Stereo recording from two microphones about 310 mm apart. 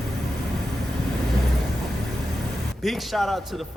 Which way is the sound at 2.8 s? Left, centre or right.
Centre.